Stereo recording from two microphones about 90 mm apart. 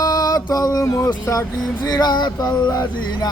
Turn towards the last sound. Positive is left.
turn(degrees=50)  # may be behind; listen again after turning